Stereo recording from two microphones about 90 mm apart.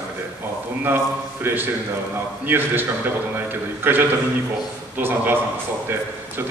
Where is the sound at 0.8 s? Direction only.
25° right (ahead or behind).